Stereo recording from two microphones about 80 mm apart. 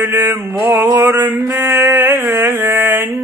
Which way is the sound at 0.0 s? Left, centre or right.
Right.